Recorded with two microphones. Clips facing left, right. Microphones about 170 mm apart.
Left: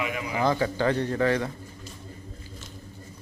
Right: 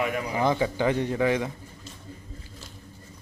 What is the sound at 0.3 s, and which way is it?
A man's voice, 20° right (ahead or behind).